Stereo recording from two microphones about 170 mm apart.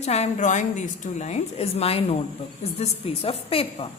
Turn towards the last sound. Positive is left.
turn(degrees=35)  # may be behind; listen again after turning